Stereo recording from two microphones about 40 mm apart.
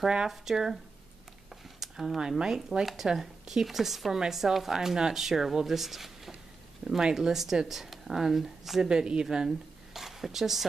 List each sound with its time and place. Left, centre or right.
0.3 s speech: centre
7.0 s speech: centre
8.8 s a woman's voice: right
9.5 s a sound: centre